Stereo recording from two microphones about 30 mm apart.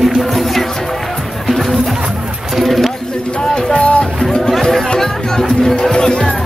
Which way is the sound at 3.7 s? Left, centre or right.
Left.